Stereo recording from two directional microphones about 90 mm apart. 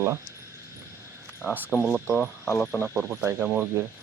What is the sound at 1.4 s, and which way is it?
Speech, 20° right (ahead or behind).